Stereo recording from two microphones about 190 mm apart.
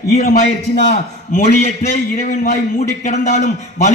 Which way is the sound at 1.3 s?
40° left (ahead or behind).